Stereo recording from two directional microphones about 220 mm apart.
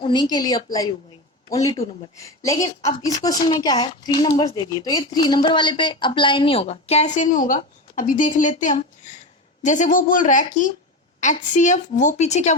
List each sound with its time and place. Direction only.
0.0 s a woman's voice: 20° left (ahead or behind)